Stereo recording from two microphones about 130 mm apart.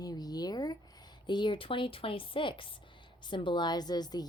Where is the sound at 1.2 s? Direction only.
35° left (ahead or behind).